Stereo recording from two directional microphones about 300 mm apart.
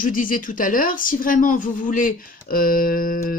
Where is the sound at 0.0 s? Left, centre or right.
Left.